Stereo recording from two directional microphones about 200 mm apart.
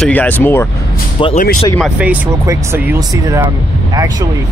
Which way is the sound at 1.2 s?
25° left (ahead or behind).